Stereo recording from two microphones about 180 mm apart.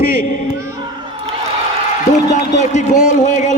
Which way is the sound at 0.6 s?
15° right (ahead or behind).